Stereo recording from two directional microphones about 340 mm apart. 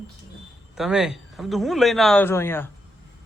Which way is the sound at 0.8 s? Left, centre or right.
Centre.